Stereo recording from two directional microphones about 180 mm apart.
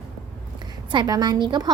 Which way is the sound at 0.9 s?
20° right (ahead or behind).